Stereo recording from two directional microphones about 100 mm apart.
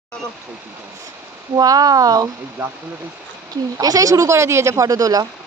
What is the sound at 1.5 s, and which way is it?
Speech, 40° right (ahead or behind).